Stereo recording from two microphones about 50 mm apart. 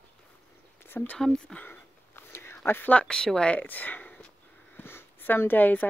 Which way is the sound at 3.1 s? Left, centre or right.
Centre.